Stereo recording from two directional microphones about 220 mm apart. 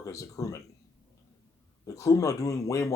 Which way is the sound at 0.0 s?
15° left (ahead or behind).